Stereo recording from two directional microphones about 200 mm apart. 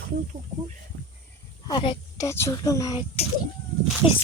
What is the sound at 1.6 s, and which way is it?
A woman's voice, 25° left (ahead or behind).